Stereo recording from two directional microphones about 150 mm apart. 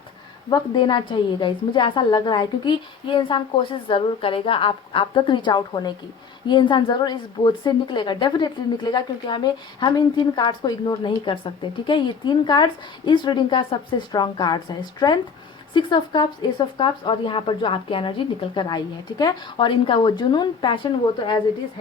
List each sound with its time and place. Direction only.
0.5 s a woman's voice: 30° left (ahead or behind)